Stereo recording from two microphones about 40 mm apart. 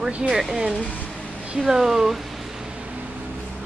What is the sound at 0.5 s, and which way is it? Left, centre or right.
Speech, centre.